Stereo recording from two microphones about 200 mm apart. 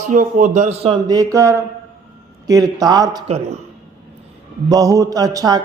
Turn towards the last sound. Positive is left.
turn(degrees=-20)  # may be behind; listen again after turning